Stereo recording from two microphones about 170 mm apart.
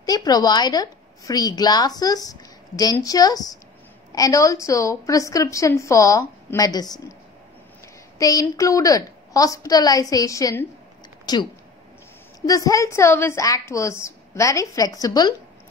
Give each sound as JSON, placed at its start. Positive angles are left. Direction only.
{"t": 0.0, "sound": "a woman's voice", "side_deg": 20}
{"t": 8.2, "sound": "a woman's voice", "side_deg": 20}